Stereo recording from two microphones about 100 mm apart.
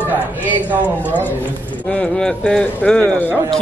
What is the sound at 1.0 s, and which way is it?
A man's voice, 20° left (ahead or behind).